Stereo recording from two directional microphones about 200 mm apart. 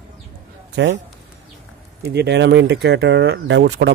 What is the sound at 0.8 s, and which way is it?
Speech, 65° right (ahead or behind).